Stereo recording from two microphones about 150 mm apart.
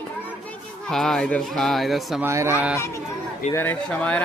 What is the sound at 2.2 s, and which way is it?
Speech, 15° right (ahead or behind).